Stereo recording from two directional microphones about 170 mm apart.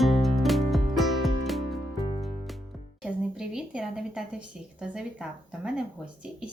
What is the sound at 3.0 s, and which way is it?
A woman's voice, 5° right (ahead or behind).